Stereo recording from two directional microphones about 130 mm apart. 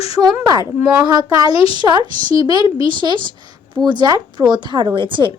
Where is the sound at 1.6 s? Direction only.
45° left (ahead or behind).